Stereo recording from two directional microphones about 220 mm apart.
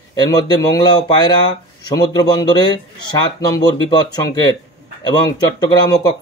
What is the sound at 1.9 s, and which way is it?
A man's voice, 15° left (ahead or behind).